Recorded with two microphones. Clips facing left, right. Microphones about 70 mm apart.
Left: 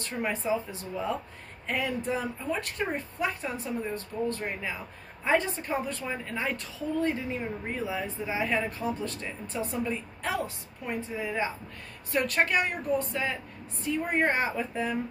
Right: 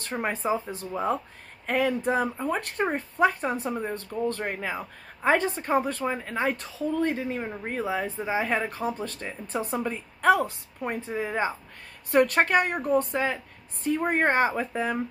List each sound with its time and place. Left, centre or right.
0.0 s a woman's voice: right
2.6 s speech: right
9.9 s a woman's voice: right